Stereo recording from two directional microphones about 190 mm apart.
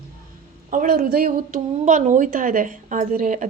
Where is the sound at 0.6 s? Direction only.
45° right (ahead or behind).